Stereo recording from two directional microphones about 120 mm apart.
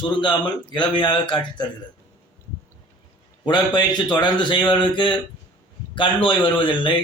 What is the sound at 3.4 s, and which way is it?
A man's voice, 35° left (ahead or behind).